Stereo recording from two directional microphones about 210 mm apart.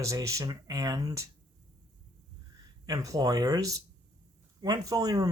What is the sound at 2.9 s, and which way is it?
Speech, 15° right (ahead or behind).